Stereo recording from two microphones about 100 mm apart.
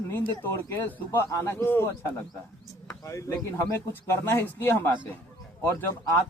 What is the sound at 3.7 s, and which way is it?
A man's voice, 25° left (ahead or behind).